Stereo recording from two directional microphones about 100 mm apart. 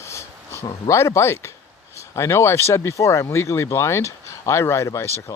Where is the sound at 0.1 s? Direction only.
30° left (ahead or behind).